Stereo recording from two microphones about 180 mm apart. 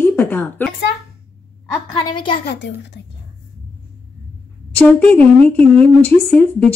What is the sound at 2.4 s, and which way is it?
Speech, 70° left (ahead or behind).